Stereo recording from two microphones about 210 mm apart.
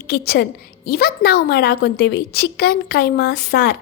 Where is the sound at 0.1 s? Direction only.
50° left (ahead or behind).